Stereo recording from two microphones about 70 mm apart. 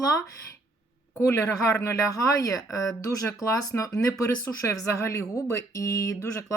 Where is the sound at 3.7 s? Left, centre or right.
Left.